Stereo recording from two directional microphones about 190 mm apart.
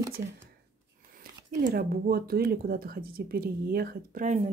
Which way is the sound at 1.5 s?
50° right (ahead or behind).